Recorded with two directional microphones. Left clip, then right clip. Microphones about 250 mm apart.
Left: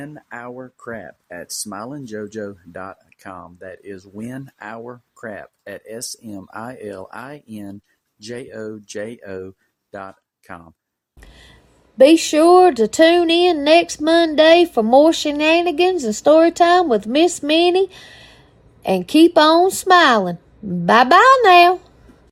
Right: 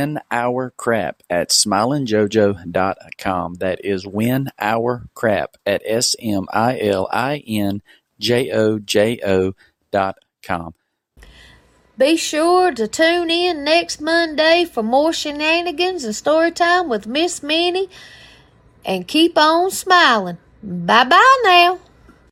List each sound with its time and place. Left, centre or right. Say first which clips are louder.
0.0 s speech: right 13 dB; right
12.0 s speech: left 4 dB; centre
19.3 s a woman's voice: left 2 dB; centre
20.7 s speech: left 1 dB; centre
21.3 s speech: left 2 dB; centre